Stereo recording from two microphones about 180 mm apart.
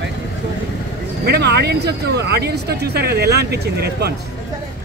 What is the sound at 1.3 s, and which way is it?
Speech, 65° right (ahead or behind).